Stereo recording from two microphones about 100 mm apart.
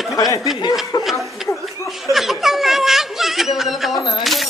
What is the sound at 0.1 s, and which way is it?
Snicker, 35° left (ahead or behind).